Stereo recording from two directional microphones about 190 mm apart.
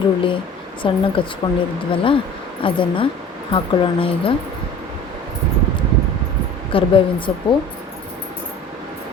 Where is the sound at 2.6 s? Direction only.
25° left (ahead or behind).